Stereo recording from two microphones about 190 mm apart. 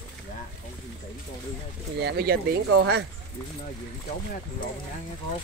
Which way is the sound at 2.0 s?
60° right (ahead or behind).